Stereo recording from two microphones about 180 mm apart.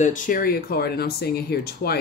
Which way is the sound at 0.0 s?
45° left (ahead or behind).